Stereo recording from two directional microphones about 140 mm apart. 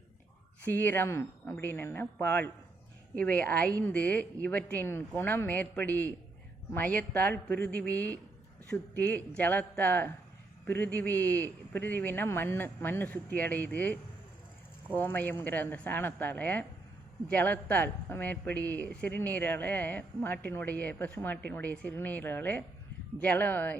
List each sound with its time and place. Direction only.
0.6 s speech: 15° left (ahead or behind)